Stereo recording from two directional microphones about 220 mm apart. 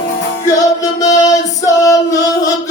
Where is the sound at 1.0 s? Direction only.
15° left (ahead or behind).